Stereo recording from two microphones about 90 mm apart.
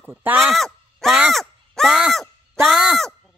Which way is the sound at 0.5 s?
Centre (ahead or behind).